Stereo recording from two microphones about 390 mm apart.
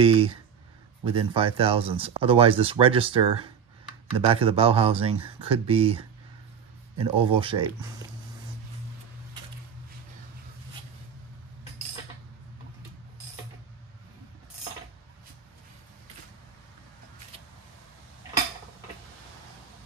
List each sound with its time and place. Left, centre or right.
0.0 s speech: centre